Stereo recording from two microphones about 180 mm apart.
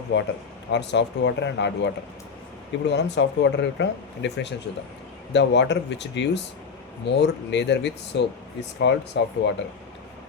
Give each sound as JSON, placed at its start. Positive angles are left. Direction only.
{"t": 0.1, "sound": "speech", "side_deg": 90}
{"t": 0.7, "sound": "speech", "side_deg": 75}